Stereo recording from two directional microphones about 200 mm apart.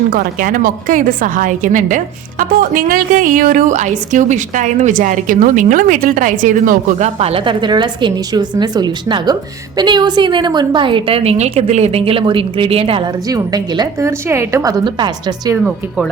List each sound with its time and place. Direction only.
0.1 s a woman's voice: 45° right (ahead or behind); by 15.5 s 25° right (ahead or behind)